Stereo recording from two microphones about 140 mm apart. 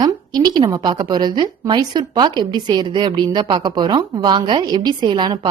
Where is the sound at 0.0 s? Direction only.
30° right (ahead or behind).